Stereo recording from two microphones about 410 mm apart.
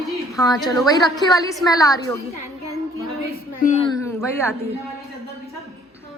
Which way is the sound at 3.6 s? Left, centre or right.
Centre.